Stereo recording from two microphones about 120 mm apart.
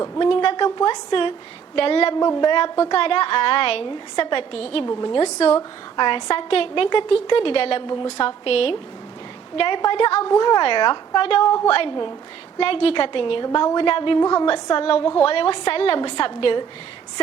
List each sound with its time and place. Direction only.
0.2 s a woman's voice: 45° left (ahead or behind)
2.1 s a woman's voice: 35° left (ahead or behind)
2.9 s a woman's voice: 50° left (ahead or behind)
4.9 s a woman's voice: 35° left (ahead or behind)
5.2 s speech: 55° left (ahead or behind)
6.0 s a woman's voice: 40° left (ahead or behind)
9.6 s a woman's voice: 40° left (ahead or behind)
10.2 s a woman's voice: 35° left (ahead or behind)
12.5 s a woman's voice: 50° left (ahead or behind)